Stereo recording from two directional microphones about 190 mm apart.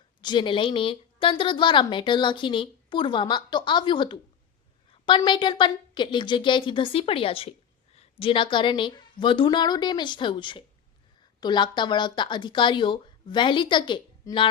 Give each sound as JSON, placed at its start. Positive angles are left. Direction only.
{"t": 0.2, "sound": "a woman's voice", "side_deg": 25}